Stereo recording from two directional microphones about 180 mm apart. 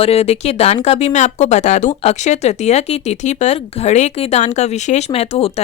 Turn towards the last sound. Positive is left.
turn(degrees=35)  # may be behind; listen again after turning